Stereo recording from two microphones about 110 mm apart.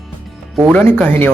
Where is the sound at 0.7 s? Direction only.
15° left (ahead or behind).